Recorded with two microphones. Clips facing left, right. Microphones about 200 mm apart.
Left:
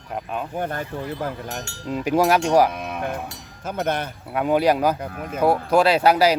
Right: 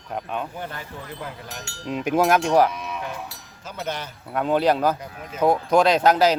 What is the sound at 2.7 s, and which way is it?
Livestock, 55° left (ahead or behind).